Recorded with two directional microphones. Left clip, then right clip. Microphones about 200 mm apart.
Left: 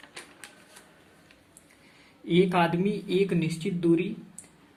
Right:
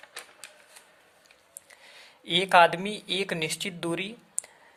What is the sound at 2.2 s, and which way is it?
A man's voice, 45° right (ahead or behind).